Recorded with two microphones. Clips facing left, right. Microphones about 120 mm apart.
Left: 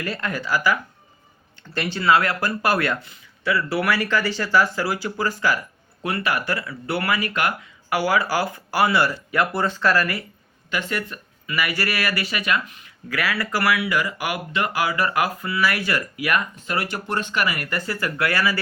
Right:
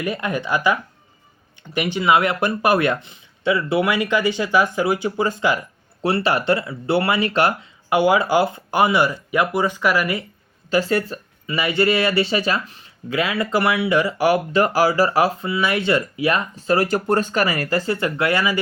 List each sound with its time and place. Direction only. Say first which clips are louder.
0.0 s speech: right 4 dB; 15° right (ahead or behind)
6.0 s speech: right 5 dB; 30° right (ahead or behind)
10.7 s speech: right 8 dB; 35° right (ahead or behind)